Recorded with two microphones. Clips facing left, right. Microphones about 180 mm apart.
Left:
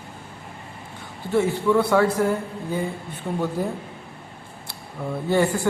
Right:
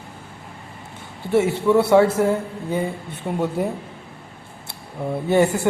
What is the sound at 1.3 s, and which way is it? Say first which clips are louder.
A man's voice: right 3 dB; 25° right (ahead or behind).